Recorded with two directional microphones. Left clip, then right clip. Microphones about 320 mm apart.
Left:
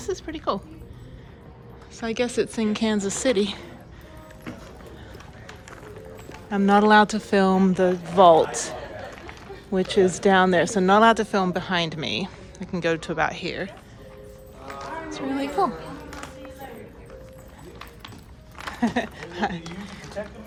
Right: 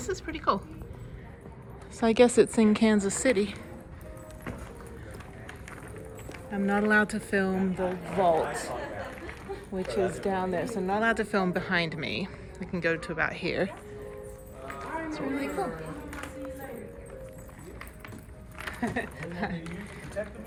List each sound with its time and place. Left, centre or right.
0.0 s speech: centre
2.0 s speech: centre
6.5 s speech: centre
9.7 s speech: left; by 13.7 s centre
15.1 s a sound: centre
18.6 s speech: centre